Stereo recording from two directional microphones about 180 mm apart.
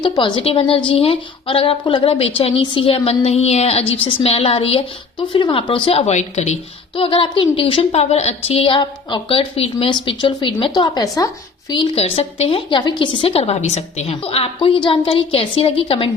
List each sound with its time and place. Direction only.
0.0 s a woman's voice: 25° left (ahead or behind)